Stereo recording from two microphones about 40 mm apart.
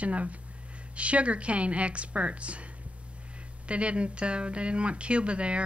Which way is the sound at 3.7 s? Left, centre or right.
Right.